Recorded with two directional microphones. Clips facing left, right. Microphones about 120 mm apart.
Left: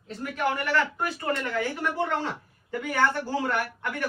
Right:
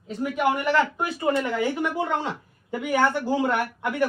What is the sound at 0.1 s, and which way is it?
A man's voice, 15° right (ahead or behind).